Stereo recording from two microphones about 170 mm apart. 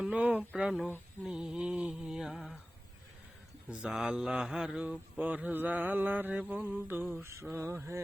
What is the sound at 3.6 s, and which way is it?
Mantra, 5° right (ahead or behind).